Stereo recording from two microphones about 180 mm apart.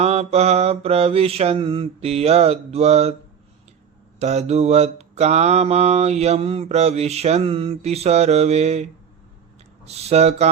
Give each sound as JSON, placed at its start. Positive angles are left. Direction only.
{"t": 0.0, "sound": "mantra", "side_deg": -35}
{"t": 4.2, "sound": "mantra", "side_deg": -35}